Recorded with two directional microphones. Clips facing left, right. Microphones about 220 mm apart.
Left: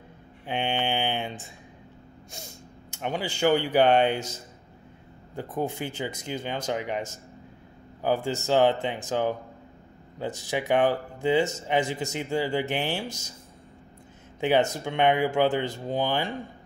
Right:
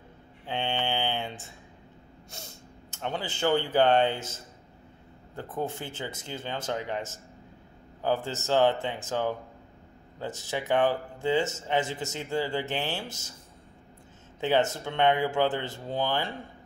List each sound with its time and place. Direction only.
0.5 s mantra: 15° left (ahead or behind)
2.9 s speech: 15° left (ahead or behind)
14.4 s speech: 15° left (ahead or behind)